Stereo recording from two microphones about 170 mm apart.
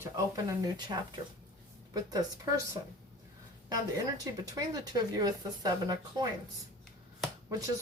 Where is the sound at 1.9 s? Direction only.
25° right (ahead or behind).